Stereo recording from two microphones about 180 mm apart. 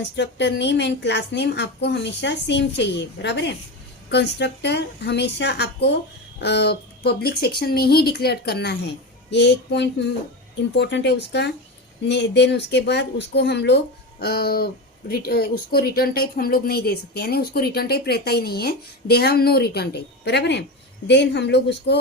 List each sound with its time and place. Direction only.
0.2 s a woman's voice: 70° left (ahead or behind)